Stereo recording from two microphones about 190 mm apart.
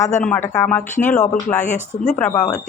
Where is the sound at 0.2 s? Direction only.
10° left (ahead or behind).